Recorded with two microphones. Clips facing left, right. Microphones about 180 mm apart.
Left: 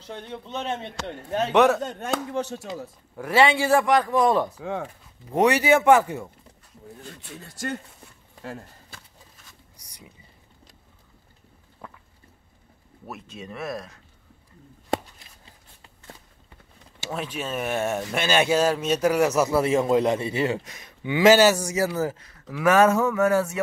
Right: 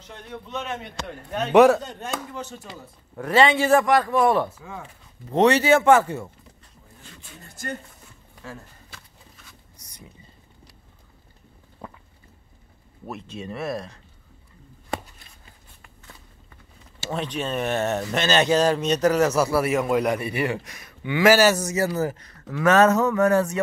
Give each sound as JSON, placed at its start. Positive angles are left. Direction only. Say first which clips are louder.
{"t": 0.0, "sound": "speech", "louder": "left 2 dB", "side_deg": 30}
{"t": 1.5, "sound": "speech", "louder": "right 4 dB", "side_deg": -5}
{"t": 1.8, "sound": "chopping", "louder": "left 4 dB", "side_deg": 55}
{"t": 2.3, "sound": "speech", "louder": "left 7 dB", "side_deg": 75}
{"t": 3.2, "sound": "speech", "louder": "right 1 dB", "side_deg": 10}
{"t": 4.6, "sound": "speech", "louder": "left 8 dB", "side_deg": 70}
{"t": 5.3, "sound": "speech", "louder": "right 2 dB", "side_deg": 10}
{"t": 7.2, "sound": "speech", "louder": "left 3 dB", "side_deg": 80}
{"t": 9.8, "sound": "a sound", "louder": "right 2 dB", "side_deg": 10}
{"t": 13.0, "sound": "speech", "louder": "right 4 dB", "side_deg": 0}
{"t": 17.1, "sound": "speech", "louder": "right 3 dB", "side_deg": 5}